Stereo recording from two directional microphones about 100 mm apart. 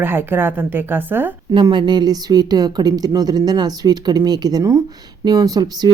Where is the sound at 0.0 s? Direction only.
20° right (ahead or behind).